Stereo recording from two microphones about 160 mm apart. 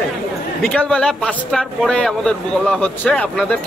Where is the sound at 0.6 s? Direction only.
5° left (ahead or behind).